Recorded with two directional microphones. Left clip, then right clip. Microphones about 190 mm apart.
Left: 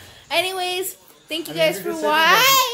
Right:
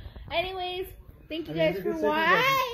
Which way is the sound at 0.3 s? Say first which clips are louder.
Left 8 dB; 25° left (ahead or behind).